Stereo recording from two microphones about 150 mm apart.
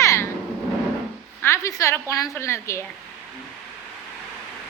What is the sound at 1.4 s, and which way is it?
A woman's voice, 20° left (ahead or behind).